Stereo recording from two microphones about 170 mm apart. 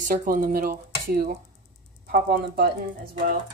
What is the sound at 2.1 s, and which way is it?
Speech, 65° right (ahead or behind).